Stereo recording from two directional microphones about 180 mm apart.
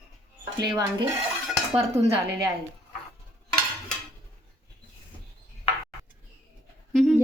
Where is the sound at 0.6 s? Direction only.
25° right (ahead or behind).